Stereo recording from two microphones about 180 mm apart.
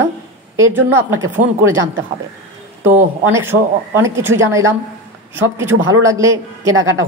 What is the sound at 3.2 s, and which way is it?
Speech, 15° right (ahead or behind).